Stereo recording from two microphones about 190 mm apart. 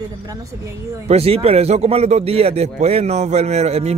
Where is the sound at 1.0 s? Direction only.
30° right (ahead or behind).